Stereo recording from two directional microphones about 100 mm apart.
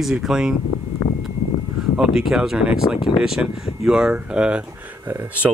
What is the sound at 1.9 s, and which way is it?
Speech, 5° right (ahead or behind).